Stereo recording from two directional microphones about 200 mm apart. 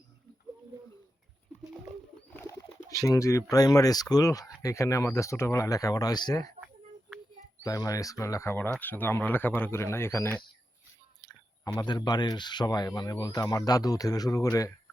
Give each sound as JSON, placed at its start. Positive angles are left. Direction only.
{"t": 2.3, "sound": "bird", "side_deg": 15}
{"t": 3.5, "sound": "speech", "side_deg": 20}
{"t": 7.6, "sound": "speech", "side_deg": 15}
{"t": 11.8, "sound": "speech", "side_deg": 20}